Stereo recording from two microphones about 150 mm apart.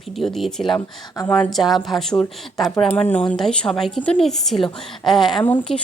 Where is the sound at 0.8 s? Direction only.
25° left (ahead or behind).